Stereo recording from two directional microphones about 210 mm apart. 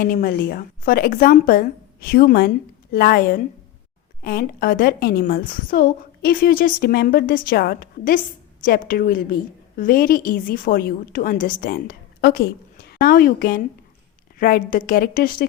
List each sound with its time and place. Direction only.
0.0 s a woman's voice: 45° left (ahead or behind)